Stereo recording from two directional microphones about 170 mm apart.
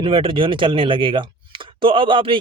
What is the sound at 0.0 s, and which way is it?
Speech, 30° right (ahead or behind).